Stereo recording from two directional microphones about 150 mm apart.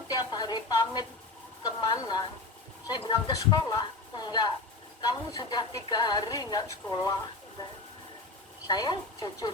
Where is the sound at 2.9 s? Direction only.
30° left (ahead or behind).